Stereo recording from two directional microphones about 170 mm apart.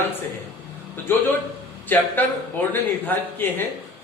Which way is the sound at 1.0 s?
10° left (ahead or behind).